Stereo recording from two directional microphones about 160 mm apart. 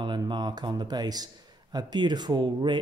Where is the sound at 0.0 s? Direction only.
30° right (ahead or behind).